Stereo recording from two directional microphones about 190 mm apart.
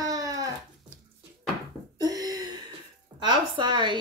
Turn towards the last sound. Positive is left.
turn(degrees=-25)  # may be behind; listen again after turning